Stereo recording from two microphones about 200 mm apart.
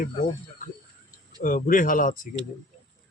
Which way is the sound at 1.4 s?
45° left (ahead or behind).